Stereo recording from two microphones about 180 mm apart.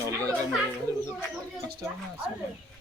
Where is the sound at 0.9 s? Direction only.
15° right (ahead or behind).